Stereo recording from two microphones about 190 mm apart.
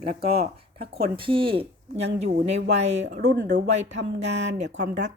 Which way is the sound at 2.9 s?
65° right (ahead or behind).